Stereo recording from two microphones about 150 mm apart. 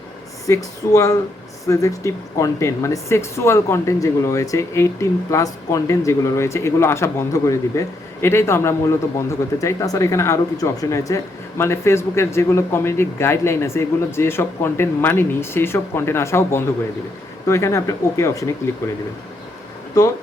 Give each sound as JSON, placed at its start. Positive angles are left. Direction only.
{"t": 0.4, "sound": "speech", "side_deg": 20}